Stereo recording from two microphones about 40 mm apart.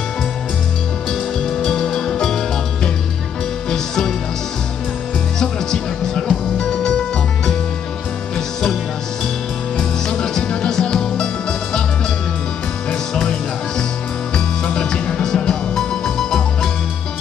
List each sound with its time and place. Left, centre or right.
1.4 s music: centre
3.7 s music: centre
5.4 s music: centre
9.8 s music: centre
13.1 s music: centre